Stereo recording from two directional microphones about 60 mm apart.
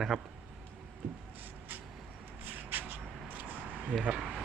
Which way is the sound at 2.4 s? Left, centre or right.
Right.